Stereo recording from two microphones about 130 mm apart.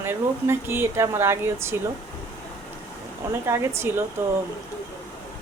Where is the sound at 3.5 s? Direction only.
20° right (ahead or behind).